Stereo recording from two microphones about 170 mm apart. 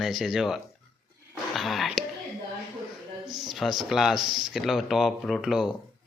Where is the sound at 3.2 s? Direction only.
25° right (ahead or behind).